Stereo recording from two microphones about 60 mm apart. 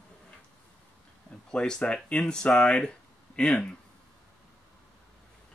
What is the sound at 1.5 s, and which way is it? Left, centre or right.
Speech, centre.